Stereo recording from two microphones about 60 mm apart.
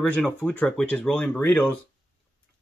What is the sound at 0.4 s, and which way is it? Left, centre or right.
Speech, left.